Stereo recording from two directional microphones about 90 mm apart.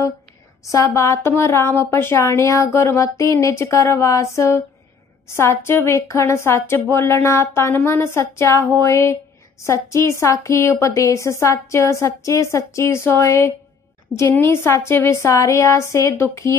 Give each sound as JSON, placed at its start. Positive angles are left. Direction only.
{"t": 0.7, "sound": "a woman's voice", "side_deg": 35}